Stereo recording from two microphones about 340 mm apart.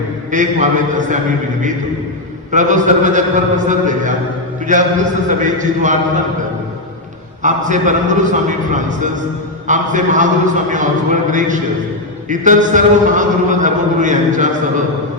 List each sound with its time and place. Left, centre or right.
0.3 s a man's voice: right
2.5 s a man's voice: right
7.4 s a man's voice: right